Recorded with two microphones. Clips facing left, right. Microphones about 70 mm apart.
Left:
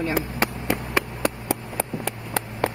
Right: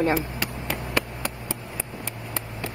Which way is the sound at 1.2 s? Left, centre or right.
Left.